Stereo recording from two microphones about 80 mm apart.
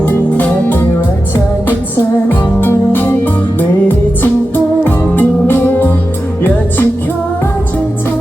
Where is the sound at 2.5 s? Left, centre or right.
Left.